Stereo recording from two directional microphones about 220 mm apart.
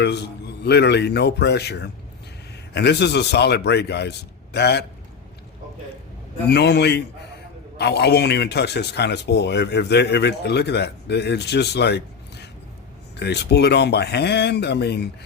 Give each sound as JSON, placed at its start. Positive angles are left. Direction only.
{"t": 0.0, "sound": "speech", "side_deg": 50}
{"t": 6.5, "sound": "speech", "side_deg": 50}